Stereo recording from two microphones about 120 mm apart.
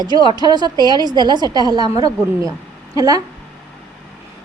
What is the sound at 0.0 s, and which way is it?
A woman's voice, 35° right (ahead or behind).